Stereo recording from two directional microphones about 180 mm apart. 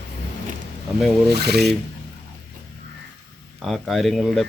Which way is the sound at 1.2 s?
65° right (ahead or behind).